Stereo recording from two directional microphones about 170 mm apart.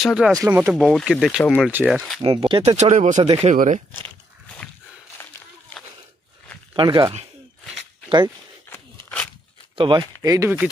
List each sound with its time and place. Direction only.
0.0 s speech: centre (ahead or behind)
0.4 s speech: 15° right (ahead or behind)
0.8 s speech: centre (ahead or behind)
2.2 s speech: 30° right (ahead or behind); by 3.8 s 45° right (ahead or behind)
5.2 s a sound: 15° left (ahead or behind)
6.7 s speech: 30° right (ahead or behind)
8.6 s a sound: 10° left (ahead or behind)
9.8 s speech: 25° right (ahead or behind)